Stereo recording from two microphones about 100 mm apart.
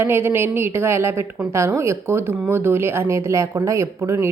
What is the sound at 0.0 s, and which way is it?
Speech, 25° right (ahead or behind).